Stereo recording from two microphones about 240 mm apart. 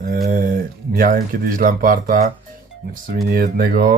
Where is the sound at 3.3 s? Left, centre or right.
Right.